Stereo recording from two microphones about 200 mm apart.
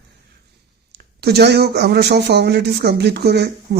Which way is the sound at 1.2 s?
55° right (ahead or behind).